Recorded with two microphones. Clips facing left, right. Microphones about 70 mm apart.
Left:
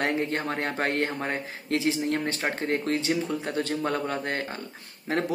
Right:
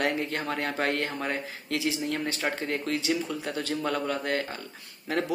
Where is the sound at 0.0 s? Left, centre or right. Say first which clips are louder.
Left 2 dB; left.